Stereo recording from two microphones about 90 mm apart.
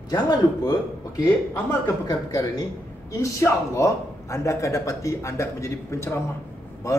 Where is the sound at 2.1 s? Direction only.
45° left (ahead or behind).